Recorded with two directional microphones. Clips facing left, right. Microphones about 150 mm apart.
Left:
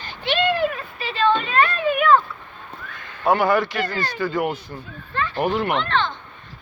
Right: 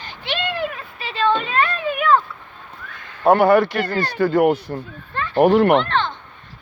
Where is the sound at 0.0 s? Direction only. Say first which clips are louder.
Left 5 dB; 20° right (ahead or behind).